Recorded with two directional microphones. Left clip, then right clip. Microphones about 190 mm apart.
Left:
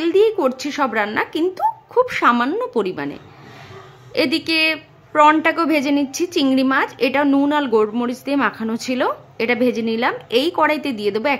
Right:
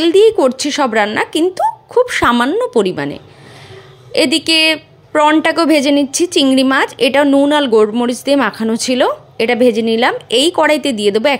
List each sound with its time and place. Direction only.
0.0 s a woman's voice: 20° right (ahead or behind)